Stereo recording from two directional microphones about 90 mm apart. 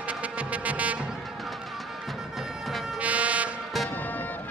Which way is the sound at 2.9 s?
15° right (ahead or behind).